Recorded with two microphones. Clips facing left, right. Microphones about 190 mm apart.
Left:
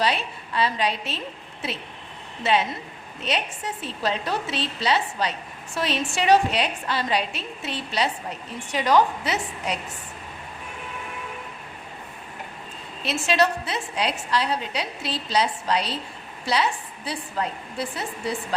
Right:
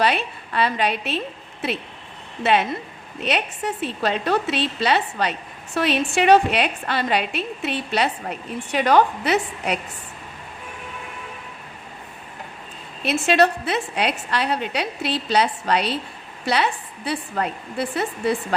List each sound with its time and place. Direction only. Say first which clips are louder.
0.0 s a woman's voice: right 3 dB; 60° right (ahead or behind)
2.4 s a woman's voice: right 3 dB; 60° right (ahead or behind)
13.1 s a woman's voice: right 4 dB; 60° right (ahead or behind)
17.1 s a woman's voice: right 4 dB; 60° right (ahead or behind)